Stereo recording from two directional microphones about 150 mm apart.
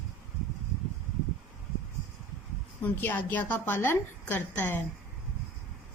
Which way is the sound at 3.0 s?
10° left (ahead or behind).